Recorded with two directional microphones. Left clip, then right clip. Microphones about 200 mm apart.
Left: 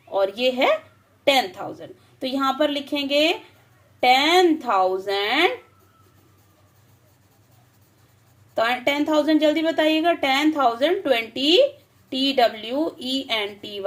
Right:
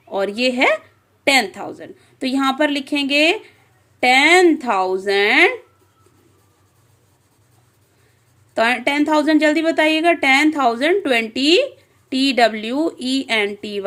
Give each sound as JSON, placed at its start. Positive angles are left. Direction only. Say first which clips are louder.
{"t": 0.1, "sound": "a woman's voice", "louder": "right 2 dB", "side_deg": -40}
{"t": 8.5, "sound": "a woman's voice", "louder": "right 4 dB", "side_deg": -45}